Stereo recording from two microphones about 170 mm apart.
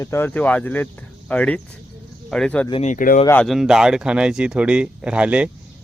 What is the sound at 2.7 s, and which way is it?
Speech, 35° left (ahead or behind).